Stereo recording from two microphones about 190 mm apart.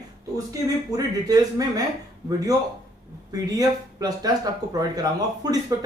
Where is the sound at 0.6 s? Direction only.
20° right (ahead or behind).